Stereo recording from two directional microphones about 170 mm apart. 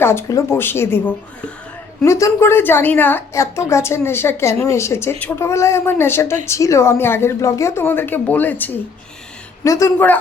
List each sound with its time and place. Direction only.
0.0 s a woman's voice: 15° left (ahead or behind)